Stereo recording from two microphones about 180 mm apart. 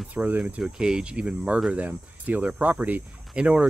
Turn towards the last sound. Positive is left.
turn(degrees=-5)  # may be behind; listen again after turning